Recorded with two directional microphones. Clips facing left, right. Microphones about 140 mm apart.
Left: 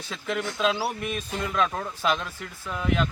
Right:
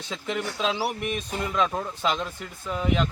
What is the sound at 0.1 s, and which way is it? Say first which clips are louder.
Speech: even; 15° right (ahead or behind).